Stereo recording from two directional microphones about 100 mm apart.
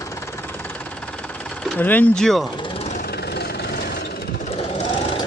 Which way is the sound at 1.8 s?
15° left (ahead or behind).